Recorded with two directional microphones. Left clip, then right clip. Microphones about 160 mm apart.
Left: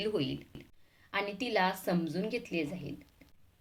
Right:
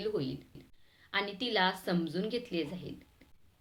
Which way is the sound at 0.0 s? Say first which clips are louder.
Left 2 dB; 25° left (ahead or behind).